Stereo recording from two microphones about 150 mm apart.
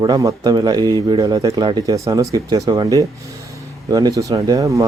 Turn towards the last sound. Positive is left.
turn(degrees=-20)  # may be behind; listen again after turning